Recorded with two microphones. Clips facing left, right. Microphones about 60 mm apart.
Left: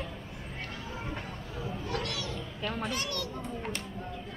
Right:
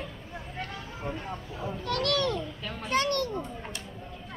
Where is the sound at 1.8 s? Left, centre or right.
Right.